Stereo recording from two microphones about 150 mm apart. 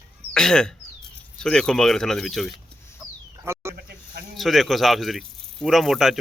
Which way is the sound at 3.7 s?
90° right.